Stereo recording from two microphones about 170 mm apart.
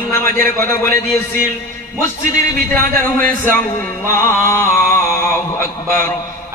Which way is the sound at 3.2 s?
10° left (ahead or behind).